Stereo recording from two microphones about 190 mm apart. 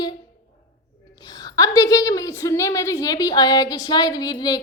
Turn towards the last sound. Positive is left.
turn(degrees=20)  # may be behind; listen again after turning